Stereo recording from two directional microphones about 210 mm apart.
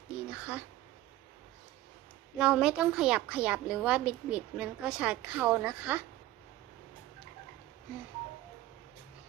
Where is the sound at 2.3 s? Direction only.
5° right (ahead or behind).